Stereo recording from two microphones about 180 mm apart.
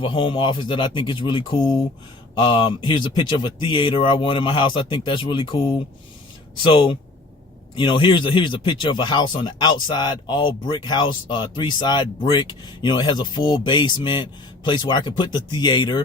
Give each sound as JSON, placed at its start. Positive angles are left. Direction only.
{"t": 0.0, "sound": "speech", "side_deg": 30}
{"t": 6.6, "sound": "speech", "side_deg": 25}